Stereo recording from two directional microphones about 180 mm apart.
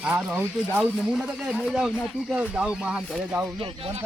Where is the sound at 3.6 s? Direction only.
30° right (ahead or behind).